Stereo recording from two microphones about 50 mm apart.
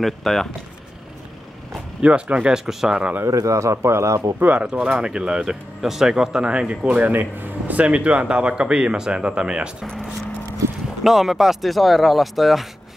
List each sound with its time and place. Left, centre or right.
0.0 s speech: centre
2.0 s speech: right
2.5 s speech: centre
3.4 s a man's voice: right
4.4 s speech: right
7.1 s speech: right; by 9.8 s centre
11.1 s speech: centre